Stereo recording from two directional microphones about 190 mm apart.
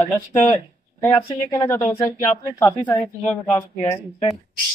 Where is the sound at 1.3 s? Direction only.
20° left (ahead or behind).